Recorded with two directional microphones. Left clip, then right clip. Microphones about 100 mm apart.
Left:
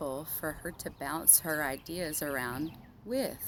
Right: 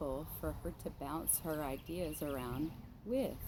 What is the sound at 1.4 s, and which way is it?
Speech, 80° left.